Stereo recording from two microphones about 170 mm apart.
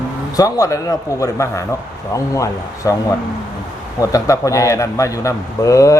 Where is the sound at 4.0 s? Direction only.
20° left (ahead or behind).